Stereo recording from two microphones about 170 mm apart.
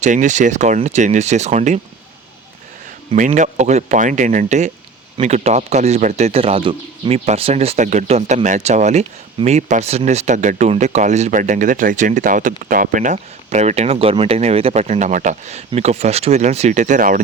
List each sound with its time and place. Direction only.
0.0 s speech: 45° right (ahead or behind)
3.2 s speech: 45° right (ahead or behind)